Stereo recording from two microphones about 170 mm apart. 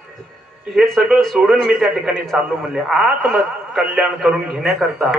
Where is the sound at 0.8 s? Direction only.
5° right (ahead or behind).